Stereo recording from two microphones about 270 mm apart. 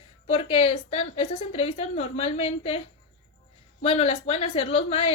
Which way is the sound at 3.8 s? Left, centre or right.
Left.